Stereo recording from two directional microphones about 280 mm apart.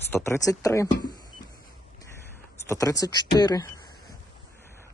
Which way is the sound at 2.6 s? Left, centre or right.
Centre.